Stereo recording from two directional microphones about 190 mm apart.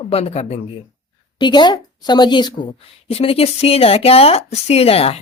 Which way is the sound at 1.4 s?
25° left (ahead or behind).